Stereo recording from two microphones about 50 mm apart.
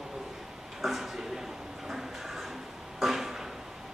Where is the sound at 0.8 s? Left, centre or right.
Centre.